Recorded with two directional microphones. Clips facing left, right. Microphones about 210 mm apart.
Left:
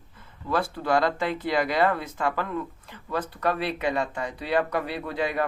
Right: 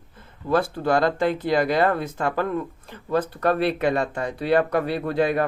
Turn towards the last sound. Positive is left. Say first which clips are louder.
# right 7 dB
turn(degrees=-50)  # may be behind; listen again after turning